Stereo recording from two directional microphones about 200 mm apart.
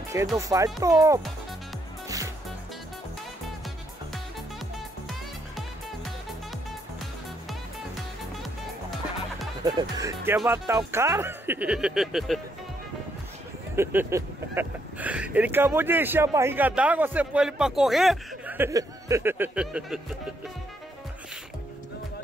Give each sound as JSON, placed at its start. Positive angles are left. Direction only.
{"t": 0.4, "sound": "speech", "side_deg": -15}
{"t": 2.0, "sound": "music", "side_deg": -15}
{"t": 9.6, "sound": "speech", "side_deg": -20}
{"t": 13.7, "sound": "speech", "side_deg": -10}